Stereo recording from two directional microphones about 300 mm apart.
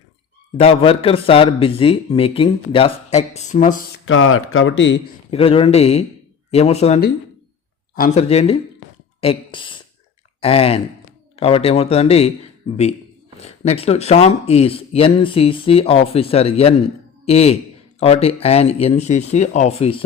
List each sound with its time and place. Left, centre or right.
0.5 s speech: centre
4.0 s speech: left
5.3 s speech: centre
13.3 s speech: left